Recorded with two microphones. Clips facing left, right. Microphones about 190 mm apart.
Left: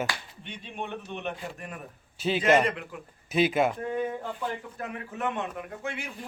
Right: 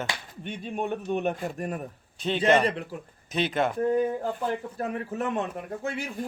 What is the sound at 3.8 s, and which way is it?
Speech, 40° right (ahead or behind).